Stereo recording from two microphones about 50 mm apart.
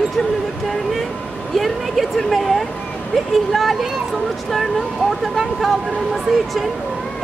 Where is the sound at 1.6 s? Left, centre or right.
Centre.